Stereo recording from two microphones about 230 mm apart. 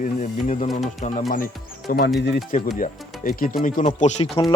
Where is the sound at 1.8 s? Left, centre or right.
Left.